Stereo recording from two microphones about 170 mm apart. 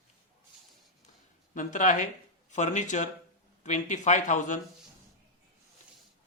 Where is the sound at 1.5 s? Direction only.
50° left (ahead or behind).